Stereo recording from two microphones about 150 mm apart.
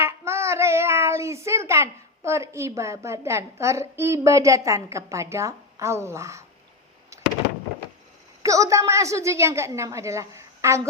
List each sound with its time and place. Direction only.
0.0 s a child's voice: 20° right (ahead or behind)
8.4 s a woman's voice: 20° right (ahead or behind)